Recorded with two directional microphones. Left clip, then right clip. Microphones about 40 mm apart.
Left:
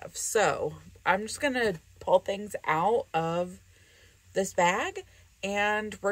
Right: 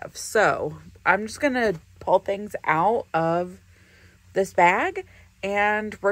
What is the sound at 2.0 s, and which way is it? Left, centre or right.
Speech, centre.